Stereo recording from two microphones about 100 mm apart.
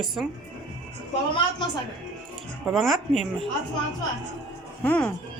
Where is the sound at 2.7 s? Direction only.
Centre (ahead or behind).